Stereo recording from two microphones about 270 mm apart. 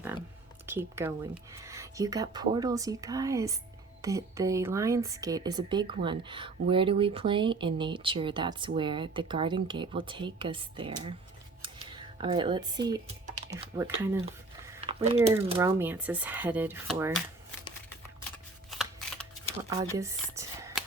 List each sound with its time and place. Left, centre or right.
0.6 s a woman's voice: centre
11.6 s a sound: centre
13.5 s a woman's voice: centre
14.8 s a sound: right
15.5 s a woman's voice: centre
18.7 s shuffling cards: centre
19.7 s speech: centre